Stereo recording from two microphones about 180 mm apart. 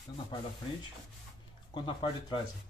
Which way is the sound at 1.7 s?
25° left (ahead or behind).